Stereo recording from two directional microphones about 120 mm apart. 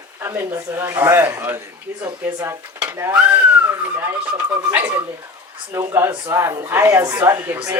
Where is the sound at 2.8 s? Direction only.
15° right (ahead or behind).